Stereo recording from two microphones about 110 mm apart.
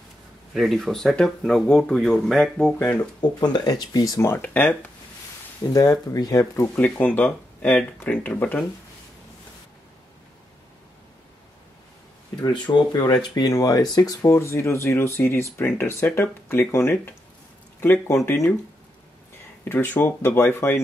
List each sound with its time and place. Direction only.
0.6 s speech: centre (ahead or behind)
3.2 s speech: 40° left (ahead or behind); by 4.9 s 15° left (ahead or behind)
5.7 s speech: 35° left (ahead or behind)
6.7 s speech: 15° left (ahead or behind)
12.4 s speech: 40° left (ahead or behind); by 18.5 s 25° left (ahead or behind)
19.7 s speech: 15° left (ahead or behind)